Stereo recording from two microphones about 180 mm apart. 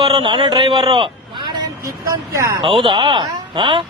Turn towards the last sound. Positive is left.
turn(degrees=-25)  # may be behind; listen again after turning